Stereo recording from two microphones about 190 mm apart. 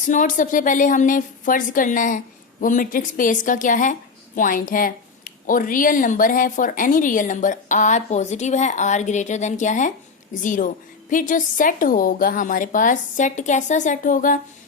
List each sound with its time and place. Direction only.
0.1 s speech: 40° left (ahead or behind)